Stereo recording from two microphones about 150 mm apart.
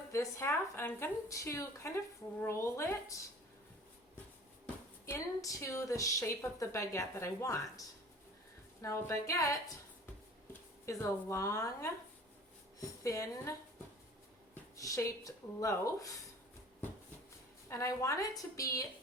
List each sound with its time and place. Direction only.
0.1 s a woman's voice: 20° left (ahead or behind)
4.6 s speech: 20° left (ahead or behind)
10.8 s speech: 20° left (ahead or behind)
13.0 s speech: 20° left (ahead or behind)
17.7 s speech: 20° left (ahead or behind)